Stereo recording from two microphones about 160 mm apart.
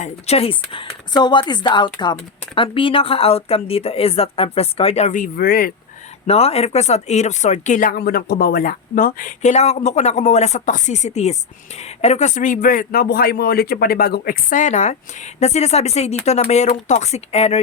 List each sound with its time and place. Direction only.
0.0 s a woman's voice: 40° left (ahead or behind); by 5.7 s 65° left (ahead or behind)
6.2 s speech: 40° left (ahead or behind)